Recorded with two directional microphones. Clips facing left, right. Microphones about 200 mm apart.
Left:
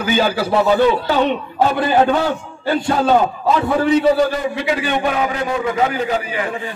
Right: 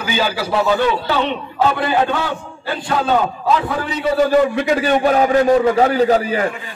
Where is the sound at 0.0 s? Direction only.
50° left (ahead or behind).